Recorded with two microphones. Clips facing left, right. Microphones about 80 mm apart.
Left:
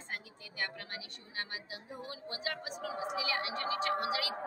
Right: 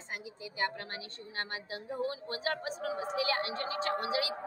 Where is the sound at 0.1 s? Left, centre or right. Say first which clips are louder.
Right 3 dB; right.